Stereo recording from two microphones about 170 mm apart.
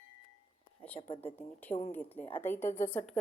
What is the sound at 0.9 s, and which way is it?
Speech, 35° left (ahead or behind).